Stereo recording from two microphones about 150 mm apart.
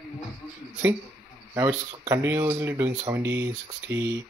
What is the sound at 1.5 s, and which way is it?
Speech, 20° right (ahead or behind).